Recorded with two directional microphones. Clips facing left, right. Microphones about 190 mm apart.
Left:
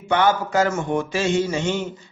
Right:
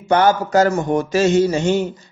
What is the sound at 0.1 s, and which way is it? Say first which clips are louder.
Mantra: right 4 dB; 40° right (ahead or behind).